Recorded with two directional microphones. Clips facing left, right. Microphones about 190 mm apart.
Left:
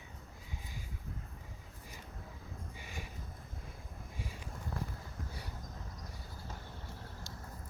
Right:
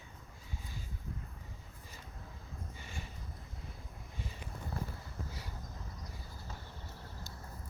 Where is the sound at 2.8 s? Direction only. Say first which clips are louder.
Left 2 dB; 10° left (ahead or behind).